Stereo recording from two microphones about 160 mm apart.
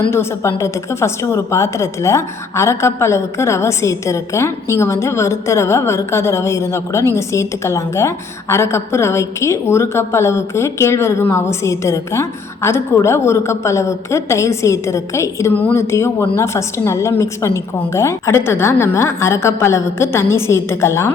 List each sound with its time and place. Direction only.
0.1 s a woman's voice: 15° left (ahead or behind)